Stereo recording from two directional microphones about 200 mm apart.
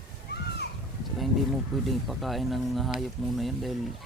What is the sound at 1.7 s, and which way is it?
Speech, centre (ahead or behind).